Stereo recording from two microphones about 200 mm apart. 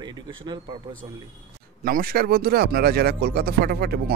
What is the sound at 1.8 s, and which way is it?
Speech, 50° right (ahead or behind).